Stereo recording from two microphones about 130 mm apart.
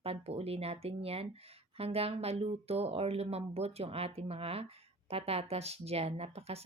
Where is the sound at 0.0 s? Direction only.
50° right (ahead or behind).